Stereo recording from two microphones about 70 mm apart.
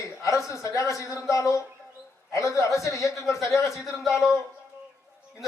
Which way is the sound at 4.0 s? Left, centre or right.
Centre.